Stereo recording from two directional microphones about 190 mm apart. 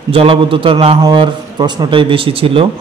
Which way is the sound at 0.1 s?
30° right (ahead or behind).